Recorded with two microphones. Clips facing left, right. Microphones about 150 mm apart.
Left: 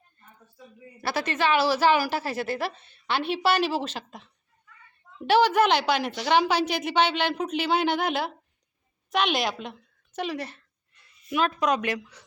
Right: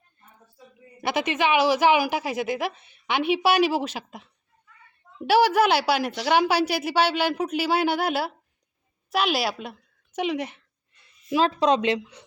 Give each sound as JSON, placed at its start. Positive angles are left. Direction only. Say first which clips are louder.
{"t": 1.0, "sound": "a woman's voice", "louder": "right 2 dB", "side_deg": -15}
{"t": 11.3, "sound": "a woman's voice", "louder": "right 4 dB", "side_deg": -30}